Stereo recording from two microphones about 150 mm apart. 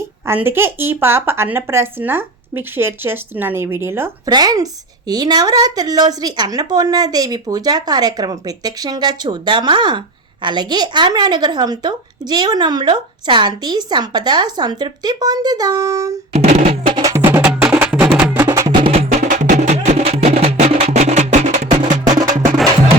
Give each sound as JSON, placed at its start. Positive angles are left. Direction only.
{"t": 0.3, "sound": "speech", "side_deg": -15}
{"t": 4.3, "sound": "a woman's voice", "side_deg": -25}
{"t": 16.3, "sound": "drum", "side_deg": -45}
{"t": 16.9, "sound": "music", "side_deg": -25}
{"t": 18.8, "sound": "music", "side_deg": -40}
{"t": 19.3, "sound": "music", "side_deg": -55}